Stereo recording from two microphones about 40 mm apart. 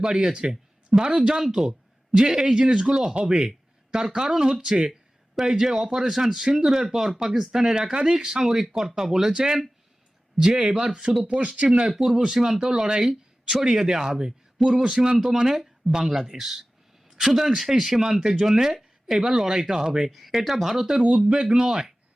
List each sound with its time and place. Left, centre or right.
0.0 s a man's voice: centre
11.2 s a man's voice: right
12.1 s speech: centre
21.0 s speech: right